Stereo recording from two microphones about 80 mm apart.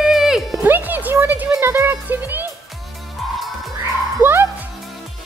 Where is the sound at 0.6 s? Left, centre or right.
Right.